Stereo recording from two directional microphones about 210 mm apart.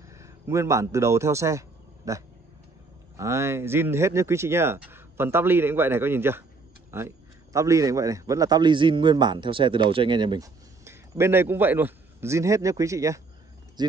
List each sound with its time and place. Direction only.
0.1 s a man's voice: 15° right (ahead or behind)
2.1 s dog: 15° right (ahead or behind)
3.2 s a man's voice: 15° right (ahead or behind)
13.8 s a sound: 20° right (ahead or behind)